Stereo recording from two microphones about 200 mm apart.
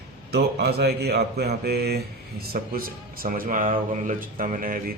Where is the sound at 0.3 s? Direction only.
55° right (ahead or behind).